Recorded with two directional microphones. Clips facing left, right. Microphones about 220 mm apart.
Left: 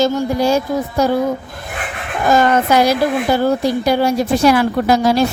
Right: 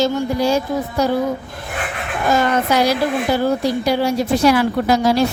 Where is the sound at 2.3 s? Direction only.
50° left (ahead or behind).